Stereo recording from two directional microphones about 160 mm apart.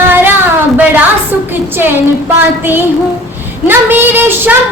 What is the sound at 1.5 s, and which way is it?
Child singing, 15° right (ahead or behind).